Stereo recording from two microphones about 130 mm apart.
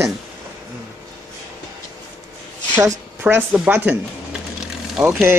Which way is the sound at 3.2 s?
15° right (ahead or behind).